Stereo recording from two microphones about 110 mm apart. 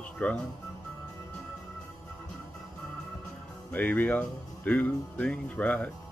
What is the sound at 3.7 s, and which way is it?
Speech, 15° left (ahead or behind).